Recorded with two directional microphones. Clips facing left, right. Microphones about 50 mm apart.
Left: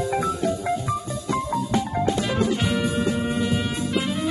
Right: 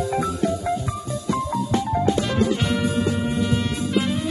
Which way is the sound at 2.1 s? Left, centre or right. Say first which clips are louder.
Right 1 dB; centre.